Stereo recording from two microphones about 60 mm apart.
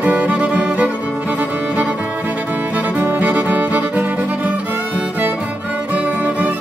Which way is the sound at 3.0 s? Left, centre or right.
Right.